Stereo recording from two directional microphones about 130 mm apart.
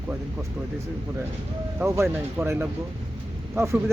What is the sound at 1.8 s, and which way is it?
Speech, 20° right (ahead or behind).